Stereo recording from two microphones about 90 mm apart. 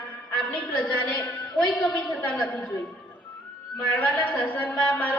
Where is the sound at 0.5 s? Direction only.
15° left (ahead or behind).